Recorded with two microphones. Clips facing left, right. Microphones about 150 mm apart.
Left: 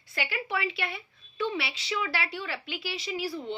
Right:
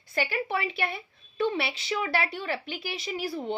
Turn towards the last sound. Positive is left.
turn(degrees=-50)  # may be behind; listen again after turning